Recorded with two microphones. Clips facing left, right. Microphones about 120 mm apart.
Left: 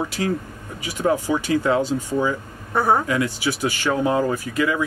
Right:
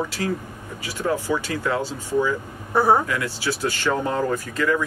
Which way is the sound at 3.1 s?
15° left (ahead or behind).